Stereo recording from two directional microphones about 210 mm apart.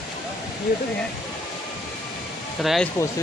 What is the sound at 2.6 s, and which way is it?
Speech, centre (ahead or behind).